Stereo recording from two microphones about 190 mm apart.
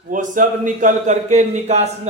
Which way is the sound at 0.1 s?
45° right (ahead or behind).